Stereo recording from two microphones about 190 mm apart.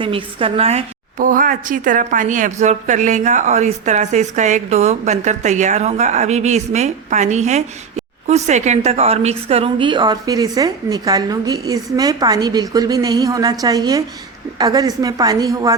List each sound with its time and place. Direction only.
0.0 s a woman's voice: 30° right (ahead or behind)
1.2 s a woman's voice: 45° right (ahead or behind); by 15.7 s 20° right (ahead or behind)